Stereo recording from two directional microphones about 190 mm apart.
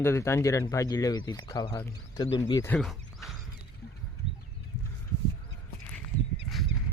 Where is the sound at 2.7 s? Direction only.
Centre (ahead or behind).